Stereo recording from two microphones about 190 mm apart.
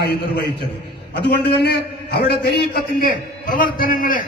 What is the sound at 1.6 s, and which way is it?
A man's voice, 55° left (ahead or behind).